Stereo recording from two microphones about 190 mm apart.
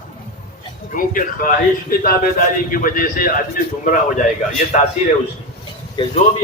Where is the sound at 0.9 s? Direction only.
45° left (ahead or behind).